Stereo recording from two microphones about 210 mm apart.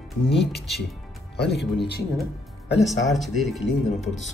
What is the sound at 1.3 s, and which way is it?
Speech, 50° left (ahead or behind).